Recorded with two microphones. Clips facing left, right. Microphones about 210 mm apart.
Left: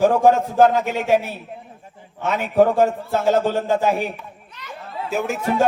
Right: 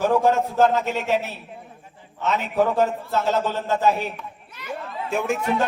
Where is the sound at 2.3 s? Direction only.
50° left (ahead or behind).